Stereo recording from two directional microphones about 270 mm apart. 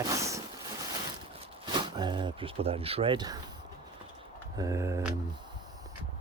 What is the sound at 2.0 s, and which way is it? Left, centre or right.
Speech, centre.